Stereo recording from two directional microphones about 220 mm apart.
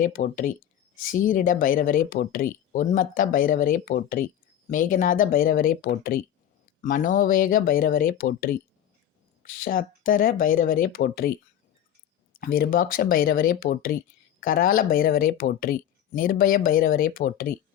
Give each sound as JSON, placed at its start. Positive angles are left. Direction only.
{"t": 0.0, "sound": "speech", "side_deg": 40}
{"t": 12.4, "sound": "speech", "side_deg": 40}